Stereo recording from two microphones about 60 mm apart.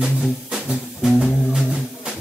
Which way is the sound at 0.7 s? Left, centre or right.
Centre.